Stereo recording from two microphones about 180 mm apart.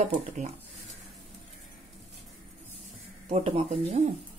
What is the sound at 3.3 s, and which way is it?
Speech, 35° right (ahead or behind).